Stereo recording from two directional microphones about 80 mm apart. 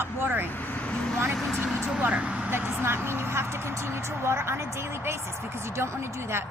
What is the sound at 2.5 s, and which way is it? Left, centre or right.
A woman's voice, right.